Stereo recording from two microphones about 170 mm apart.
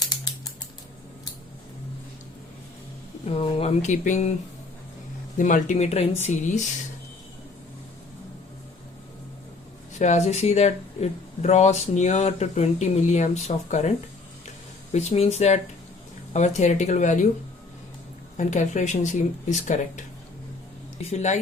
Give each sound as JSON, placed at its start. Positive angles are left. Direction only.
{"t": 0.0, "sound": "typing", "side_deg": 25}
{"t": 3.2, "sound": "speech", "side_deg": 35}
{"t": 5.4, "sound": "speech", "side_deg": 50}
{"t": 10.0, "sound": "speech", "side_deg": 40}
{"t": 14.9, "sound": "speech", "side_deg": 40}
{"t": 18.3, "sound": "speech", "side_deg": 45}
{"t": 21.1, "sound": "speech", "side_deg": 40}